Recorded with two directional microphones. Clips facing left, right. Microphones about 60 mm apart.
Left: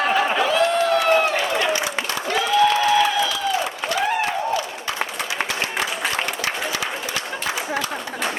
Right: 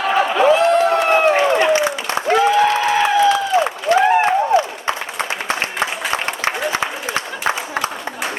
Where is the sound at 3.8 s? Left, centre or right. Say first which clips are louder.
Right 9 dB; right.